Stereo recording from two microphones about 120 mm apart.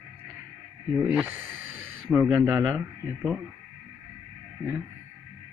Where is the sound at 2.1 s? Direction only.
Centre (ahead or behind).